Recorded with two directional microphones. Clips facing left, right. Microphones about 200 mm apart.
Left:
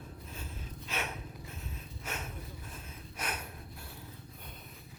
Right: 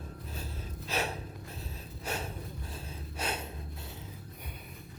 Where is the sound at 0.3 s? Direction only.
35° right (ahead or behind).